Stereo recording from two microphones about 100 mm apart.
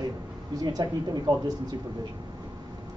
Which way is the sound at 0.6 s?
40° right (ahead or behind).